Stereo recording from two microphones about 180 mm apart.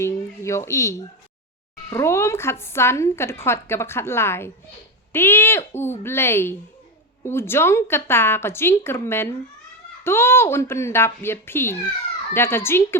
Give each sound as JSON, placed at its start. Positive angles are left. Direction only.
{"t": 0.0, "sound": "speech", "side_deg": 15}